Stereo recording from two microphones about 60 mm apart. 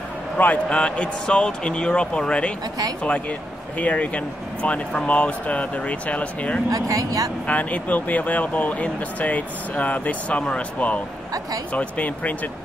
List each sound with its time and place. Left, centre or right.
0.7 s speech: centre
6.7 s speech: right
7.4 s speech: left